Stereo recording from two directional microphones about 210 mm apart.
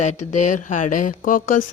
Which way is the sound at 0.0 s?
35° left (ahead or behind).